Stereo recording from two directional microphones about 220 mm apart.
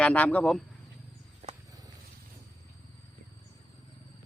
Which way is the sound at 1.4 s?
30° right (ahead or behind).